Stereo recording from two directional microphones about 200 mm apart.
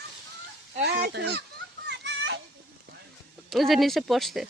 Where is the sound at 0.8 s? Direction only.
50° right (ahead or behind).